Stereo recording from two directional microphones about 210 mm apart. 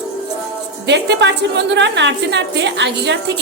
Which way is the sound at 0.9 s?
55° right (ahead or behind).